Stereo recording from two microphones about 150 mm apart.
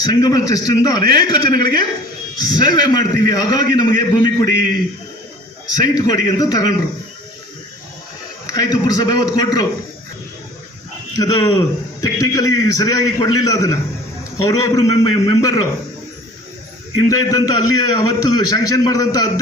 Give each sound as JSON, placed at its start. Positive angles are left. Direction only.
{"t": 0.0, "sound": "a man's voice", "side_deg": 25}
{"t": 5.7, "sound": "a man's voice", "side_deg": 25}
{"t": 8.4, "sound": "a man's voice", "side_deg": 25}
{"t": 11.2, "sound": "a man's voice", "side_deg": 25}
{"t": 17.1, "sound": "a man's voice", "side_deg": 25}